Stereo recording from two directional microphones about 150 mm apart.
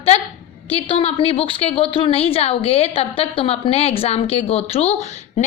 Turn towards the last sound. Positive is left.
turn(degrees=50)  # may be behind; listen again after turning